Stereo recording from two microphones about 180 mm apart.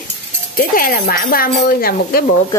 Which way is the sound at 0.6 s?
50° left (ahead or behind).